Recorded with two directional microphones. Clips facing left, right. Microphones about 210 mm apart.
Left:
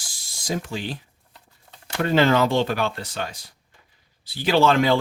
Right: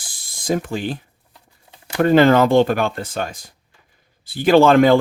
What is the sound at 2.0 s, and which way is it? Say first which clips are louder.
Speech: right 6 dB; 50° right (ahead or behind).